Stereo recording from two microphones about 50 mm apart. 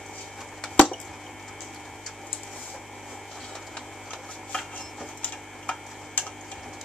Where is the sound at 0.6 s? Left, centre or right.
Centre.